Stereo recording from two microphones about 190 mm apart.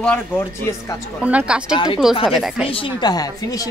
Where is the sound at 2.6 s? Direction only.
30° left (ahead or behind).